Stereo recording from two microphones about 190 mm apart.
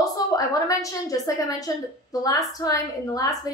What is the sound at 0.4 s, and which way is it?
A woman's voice, 20° left (ahead or behind).